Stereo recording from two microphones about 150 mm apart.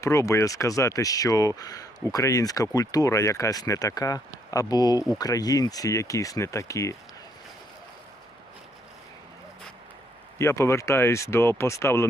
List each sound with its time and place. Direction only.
0.0 s speech: 20° left (ahead or behind)
10.3 s speech: 20° left (ahead or behind)